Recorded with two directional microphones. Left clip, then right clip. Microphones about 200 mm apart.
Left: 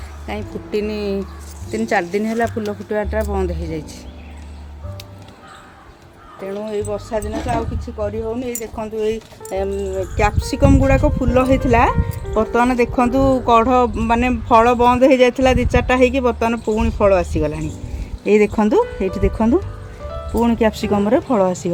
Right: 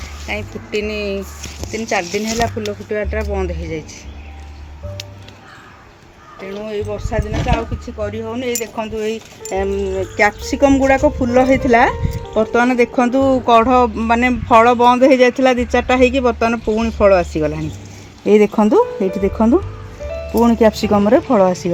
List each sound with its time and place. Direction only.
0.3 s speech: 45° left (ahead or behind)
2.9 s speech: 60° left (ahead or behind)
6.7 s speech: 30° left (ahead or behind)
8.2 s speech: 25° right (ahead or behind)
8.7 s speech: 35° right (ahead or behind); by 21.7 s 20° right (ahead or behind)